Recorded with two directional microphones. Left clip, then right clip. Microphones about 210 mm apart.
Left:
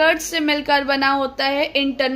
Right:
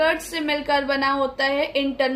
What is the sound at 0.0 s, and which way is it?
A woman's voice, 45° left (ahead or behind).